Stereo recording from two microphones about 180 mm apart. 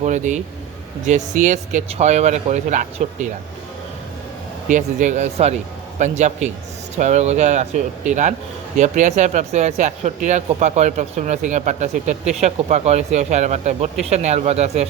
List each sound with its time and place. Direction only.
0.0 s speech: 40° right (ahead or behind)
4.7 s speech: 45° right (ahead or behind)